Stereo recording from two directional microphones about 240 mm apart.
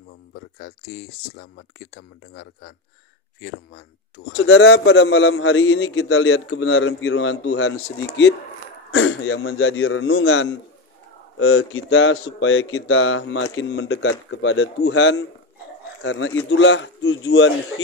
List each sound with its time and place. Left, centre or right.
0.3 s a man's voice: left
8.9 s a man's voice: left